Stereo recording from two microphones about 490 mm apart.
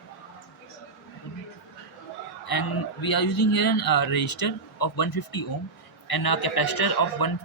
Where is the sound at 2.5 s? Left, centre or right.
Left.